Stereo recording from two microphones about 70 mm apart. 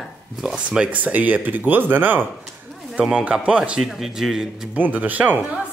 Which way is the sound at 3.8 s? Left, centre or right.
Centre.